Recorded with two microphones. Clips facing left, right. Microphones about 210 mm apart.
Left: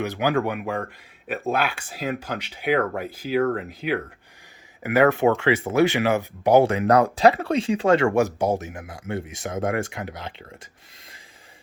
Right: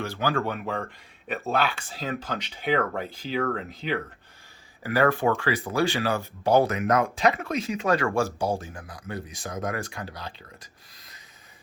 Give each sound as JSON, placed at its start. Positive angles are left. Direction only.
{"t": 0.0, "sound": "speech", "side_deg": 20}
{"t": 4.8, "sound": "speech", "side_deg": 20}